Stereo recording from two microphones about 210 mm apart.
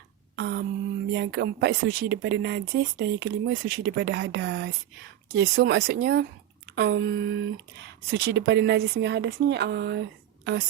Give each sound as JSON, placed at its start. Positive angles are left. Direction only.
{"t": 0.3, "sound": "a sound", "side_deg": -55}
{"t": 1.1, "sound": "speech", "side_deg": -60}
{"t": 6.7, "sound": "speech", "side_deg": -60}